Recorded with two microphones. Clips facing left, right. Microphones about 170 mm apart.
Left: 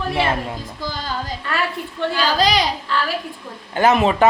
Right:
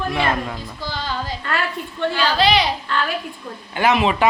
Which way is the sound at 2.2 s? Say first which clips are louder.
Right 1 dB; 45° left (ahead or behind).